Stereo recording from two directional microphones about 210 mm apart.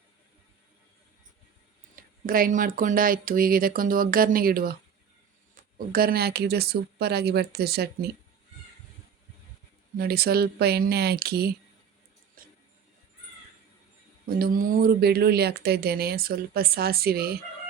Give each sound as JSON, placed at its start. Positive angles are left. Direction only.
{"t": 2.0, "sound": "speech", "side_deg": -45}
{"t": 10.0, "sound": "speech", "side_deg": -45}
{"t": 12.4, "sound": "music", "side_deg": -45}
{"t": 14.3, "sound": "speech", "side_deg": -45}